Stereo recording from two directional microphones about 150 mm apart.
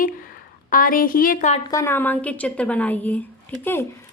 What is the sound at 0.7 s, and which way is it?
Speech, 70° left (ahead or behind).